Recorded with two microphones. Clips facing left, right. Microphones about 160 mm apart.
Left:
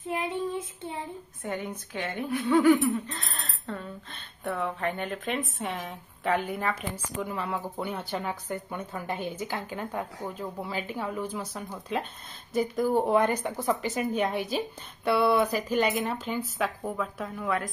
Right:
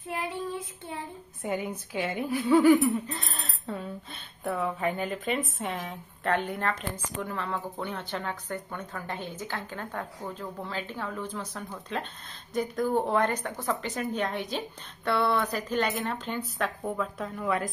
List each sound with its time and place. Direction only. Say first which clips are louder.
0.0 s child singing: left 3 dB; 20° left (ahead or behind)
1.4 s speech: right 3 dB; 10° right (ahead or behind)